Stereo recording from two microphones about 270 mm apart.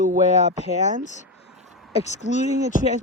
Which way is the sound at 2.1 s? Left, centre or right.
Left.